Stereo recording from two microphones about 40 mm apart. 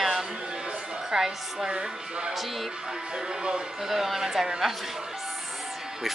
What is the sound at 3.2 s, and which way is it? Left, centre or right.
Speech, centre.